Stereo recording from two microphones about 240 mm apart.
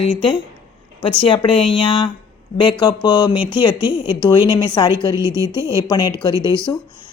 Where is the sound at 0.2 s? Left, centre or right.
Centre.